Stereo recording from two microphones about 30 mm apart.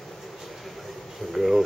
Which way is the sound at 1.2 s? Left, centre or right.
Centre.